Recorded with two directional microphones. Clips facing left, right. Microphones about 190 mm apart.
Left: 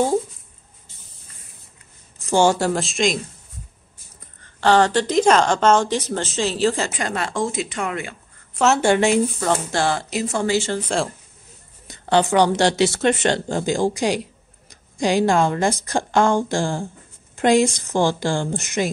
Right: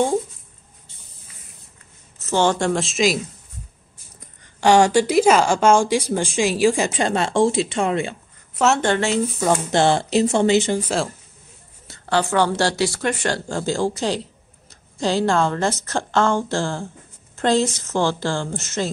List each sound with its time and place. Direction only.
2.1 s a woman's voice: 10° left (ahead or behind)
4.2 s a woman's voice: 15° right (ahead or behind)
6.9 s speech: 25° right (ahead or behind)
8.5 s speech: centre (ahead or behind)
9.3 s a woman's voice: 10° right (ahead or behind)
9.7 s speech: 25° right (ahead or behind)
10.8 s speech: 5° right (ahead or behind)
11.9 s speech: 20° left (ahead or behind)